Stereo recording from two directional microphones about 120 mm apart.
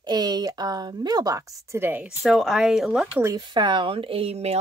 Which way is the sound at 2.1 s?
Centre (ahead or behind).